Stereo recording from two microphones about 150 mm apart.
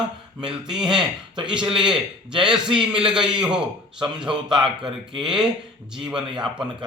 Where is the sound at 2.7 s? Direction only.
35° right (ahead or behind).